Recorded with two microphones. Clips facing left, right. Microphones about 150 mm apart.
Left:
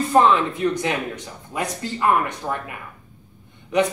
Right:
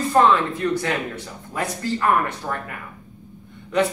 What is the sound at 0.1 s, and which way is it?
Speech, 15° left (ahead or behind).